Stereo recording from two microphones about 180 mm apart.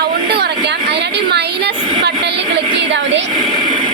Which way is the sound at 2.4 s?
80° right.